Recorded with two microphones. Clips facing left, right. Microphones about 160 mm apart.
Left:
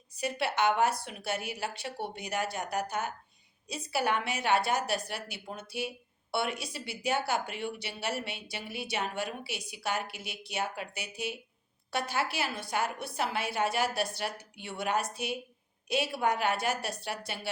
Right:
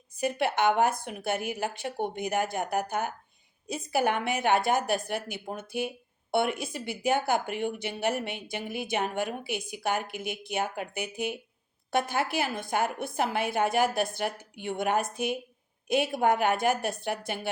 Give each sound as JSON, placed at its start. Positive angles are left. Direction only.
{"t": 0.2, "sound": "a woman's voice", "side_deg": -50}